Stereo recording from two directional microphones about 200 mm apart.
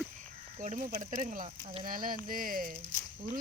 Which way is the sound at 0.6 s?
35° right (ahead or behind).